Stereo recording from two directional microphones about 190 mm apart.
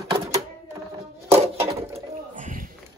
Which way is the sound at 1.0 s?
30° right (ahead or behind).